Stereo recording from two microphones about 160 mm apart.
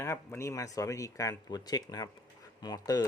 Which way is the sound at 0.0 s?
15° left (ahead or behind).